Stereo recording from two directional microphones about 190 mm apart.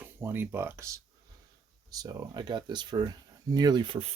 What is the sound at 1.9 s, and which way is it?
Speech, 20° right (ahead or behind).